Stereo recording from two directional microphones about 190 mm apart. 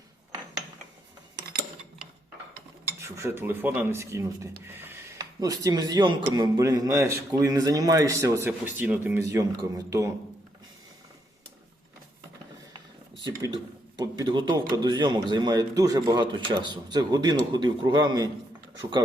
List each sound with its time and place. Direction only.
3.0 s a man's voice: 15° right (ahead or behind)
13.2 s speech: 25° right (ahead or behind)